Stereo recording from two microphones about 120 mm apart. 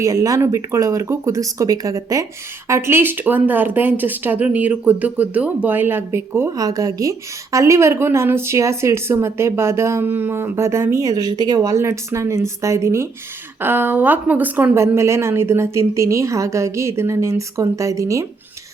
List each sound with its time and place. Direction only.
0.0 s speech: 30° right (ahead or behind)